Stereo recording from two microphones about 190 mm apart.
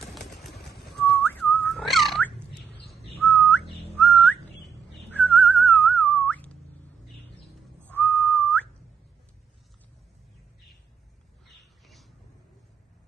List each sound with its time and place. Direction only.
0.7 s whistling: 55° left (ahead or behind)
0.9 s whistling: 5° left (ahead or behind)
7.8 s whistling: 10° left (ahead or behind)